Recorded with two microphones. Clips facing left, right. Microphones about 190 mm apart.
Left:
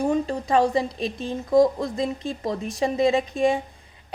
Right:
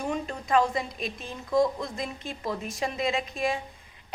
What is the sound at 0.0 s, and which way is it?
A woman's voice, 35° left (ahead or behind).